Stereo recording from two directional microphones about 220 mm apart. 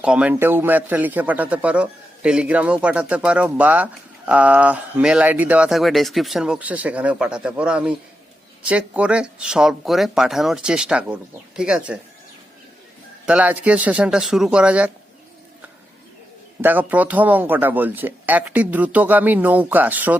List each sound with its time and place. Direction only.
0.0 s speech: 5° right (ahead or behind)
13.2 s speech: 5° right (ahead or behind)
16.6 s speech: 10° right (ahead or behind)